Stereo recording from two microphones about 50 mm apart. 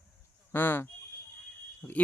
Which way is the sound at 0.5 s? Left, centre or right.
Left.